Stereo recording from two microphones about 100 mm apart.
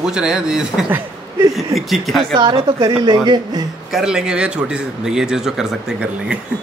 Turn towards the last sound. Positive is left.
turn(degrees=-10)  # may be behind; listen again after turning